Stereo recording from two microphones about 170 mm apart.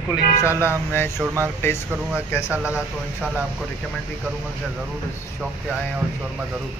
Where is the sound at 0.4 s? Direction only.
15° left (ahead or behind).